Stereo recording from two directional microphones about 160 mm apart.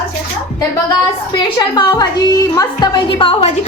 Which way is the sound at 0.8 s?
25° left (ahead or behind).